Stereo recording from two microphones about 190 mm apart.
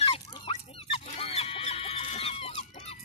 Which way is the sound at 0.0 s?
30° left (ahead or behind).